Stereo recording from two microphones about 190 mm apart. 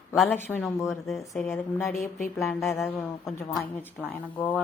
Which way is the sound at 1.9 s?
45° left (ahead or behind).